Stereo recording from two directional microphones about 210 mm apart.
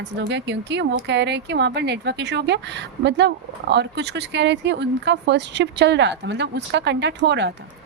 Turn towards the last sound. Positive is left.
turn(degrees=-55)  # may be behind; listen again after turning